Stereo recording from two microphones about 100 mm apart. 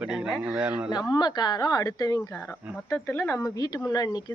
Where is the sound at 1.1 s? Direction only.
45° left (ahead or behind).